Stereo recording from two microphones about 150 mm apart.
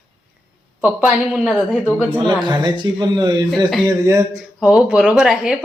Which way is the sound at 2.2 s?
30° right (ahead or behind).